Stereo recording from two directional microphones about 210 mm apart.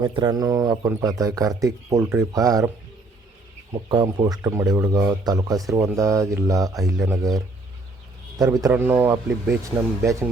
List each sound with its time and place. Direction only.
0.0 s speech: 20° right (ahead or behind)
3.7 s speech: 20° right (ahead or behind)
8.4 s speech: 15° right (ahead or behind)